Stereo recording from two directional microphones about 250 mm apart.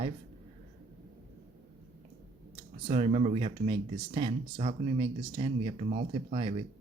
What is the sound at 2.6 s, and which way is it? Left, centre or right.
Speech, right.